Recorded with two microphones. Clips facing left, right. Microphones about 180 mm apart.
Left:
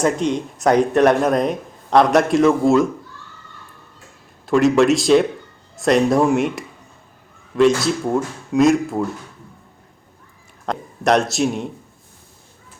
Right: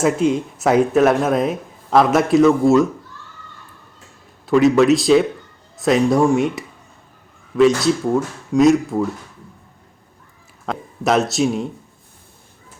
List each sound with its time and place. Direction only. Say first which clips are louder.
0.0 s speech: right 2 dB; 5° right (ahead or behind)
4.4 s speech: right 1 dB; centre (ahead or behind)
10.7 s a man's voice: left 1 dB; centre (ahead or behind)